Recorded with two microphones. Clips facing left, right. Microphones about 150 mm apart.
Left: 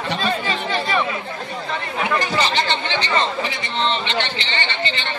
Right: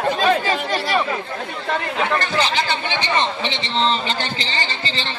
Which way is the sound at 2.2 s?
5° left (ahead or behind).